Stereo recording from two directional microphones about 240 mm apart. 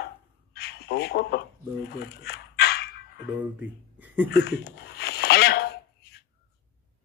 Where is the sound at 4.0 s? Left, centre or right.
Centre.